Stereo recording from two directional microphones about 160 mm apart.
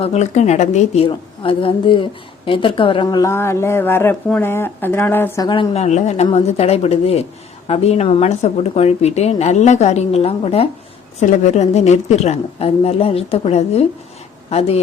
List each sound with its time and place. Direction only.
0.0 s a woman's voice: 45° left (ahead or behind)
1.0 s a woman's voice: 35° left (ahead or behind); by 5.5 s 15° left (ahead or behind)
5.5 s a woman's voice: 30° left (ahead or behind)
5.8 s a woman's voice: 45° left (ahead or behind)